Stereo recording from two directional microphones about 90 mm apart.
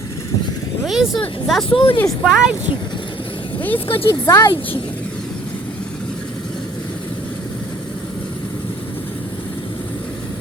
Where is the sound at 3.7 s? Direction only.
90° left.